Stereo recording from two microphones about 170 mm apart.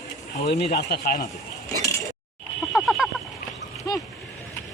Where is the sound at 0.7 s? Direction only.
70° left (ahead or behind).